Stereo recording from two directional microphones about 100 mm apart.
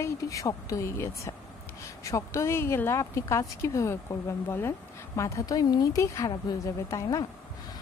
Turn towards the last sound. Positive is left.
turn(degrees=35)  # may be behind; listen again after turning